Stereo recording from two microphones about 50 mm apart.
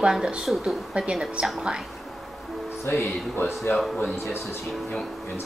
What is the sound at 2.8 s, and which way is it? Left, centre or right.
Speech, left.